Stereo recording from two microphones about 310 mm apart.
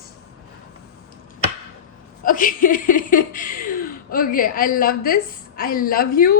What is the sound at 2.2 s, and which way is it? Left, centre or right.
Speech, left.